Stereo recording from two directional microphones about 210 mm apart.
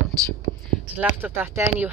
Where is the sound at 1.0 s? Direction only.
5° right (ahead or behind).